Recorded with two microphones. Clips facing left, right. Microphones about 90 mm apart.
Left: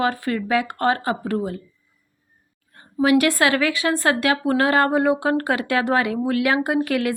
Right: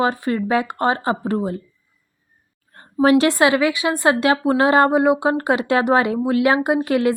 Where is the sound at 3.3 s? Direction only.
20° right (ahead or behind).